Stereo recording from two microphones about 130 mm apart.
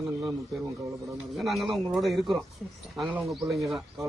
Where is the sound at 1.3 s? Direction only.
Centre (ahead or behind).